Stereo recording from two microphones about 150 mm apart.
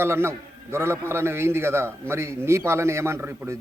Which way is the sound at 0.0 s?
15° right (ahead or behind).